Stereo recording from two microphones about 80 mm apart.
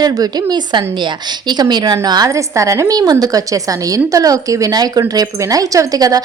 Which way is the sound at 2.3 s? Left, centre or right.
Right.